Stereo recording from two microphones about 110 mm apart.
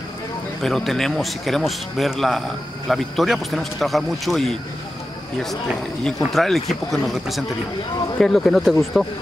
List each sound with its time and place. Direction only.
0.6 s a man's voice: 5° left (ahead or behind)
6.0 s a man's voice: 5° left (ahead or behind)